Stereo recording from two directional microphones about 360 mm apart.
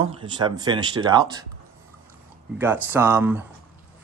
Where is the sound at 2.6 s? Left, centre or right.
Centre.